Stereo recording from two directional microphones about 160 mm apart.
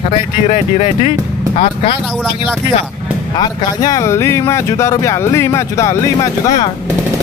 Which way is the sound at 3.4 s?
25° left (ahead or behind).